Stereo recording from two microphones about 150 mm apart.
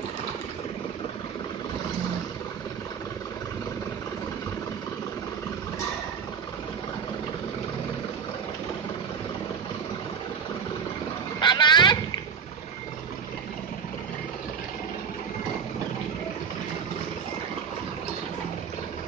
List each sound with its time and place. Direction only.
11.3 s vehicle: 30° left (ahead or behind)